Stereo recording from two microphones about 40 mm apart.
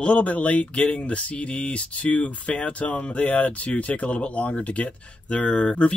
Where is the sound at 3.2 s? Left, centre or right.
Left.